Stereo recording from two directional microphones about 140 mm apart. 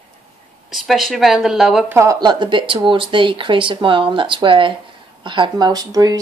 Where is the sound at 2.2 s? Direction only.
35° right (ahead or behind).